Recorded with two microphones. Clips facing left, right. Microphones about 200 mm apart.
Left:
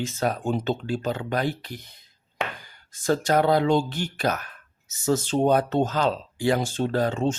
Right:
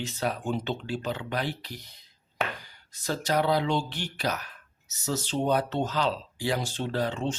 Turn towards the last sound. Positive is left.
turn(degrees=45)  # may be behind; listen again after turning